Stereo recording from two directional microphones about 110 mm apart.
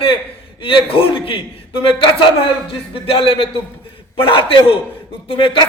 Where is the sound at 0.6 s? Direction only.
50° left (ahead or behind).